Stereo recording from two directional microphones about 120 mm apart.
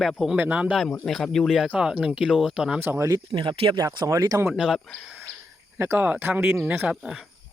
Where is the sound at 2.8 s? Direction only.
20° right (ahead or behind).